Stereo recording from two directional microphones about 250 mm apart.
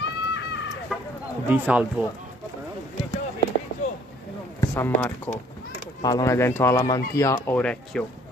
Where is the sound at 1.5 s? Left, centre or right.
Centre.